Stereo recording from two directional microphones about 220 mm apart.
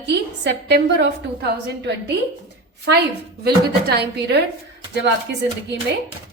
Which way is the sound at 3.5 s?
45° right (ahead or behind).